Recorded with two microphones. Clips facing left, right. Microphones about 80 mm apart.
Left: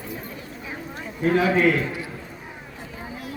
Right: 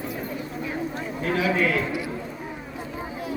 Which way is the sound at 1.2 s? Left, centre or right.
Left.